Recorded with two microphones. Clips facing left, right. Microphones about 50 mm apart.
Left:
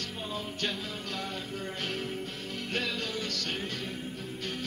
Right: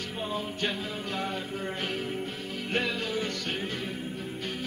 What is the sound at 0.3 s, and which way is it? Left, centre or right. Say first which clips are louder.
Music: right 3 dB; centre.